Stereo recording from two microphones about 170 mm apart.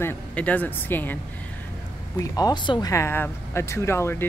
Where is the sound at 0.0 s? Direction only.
10° left (ahead or behind).